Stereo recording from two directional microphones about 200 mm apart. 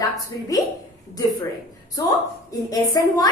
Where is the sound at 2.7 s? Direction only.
20° left (ahead or behind).